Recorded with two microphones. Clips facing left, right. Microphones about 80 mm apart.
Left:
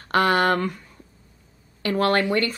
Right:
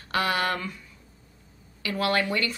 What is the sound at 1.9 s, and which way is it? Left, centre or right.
Speech, left.